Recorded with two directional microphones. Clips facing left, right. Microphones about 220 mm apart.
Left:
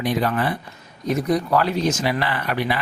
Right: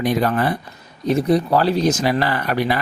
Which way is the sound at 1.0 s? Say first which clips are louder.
Right 4 dB; 30° right (ahead or behind).